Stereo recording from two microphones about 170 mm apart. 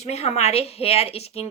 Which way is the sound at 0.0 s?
40° left (ahead or behind).